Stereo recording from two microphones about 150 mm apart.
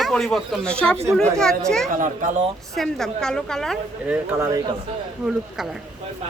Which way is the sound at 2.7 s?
Centre (ahead or behind).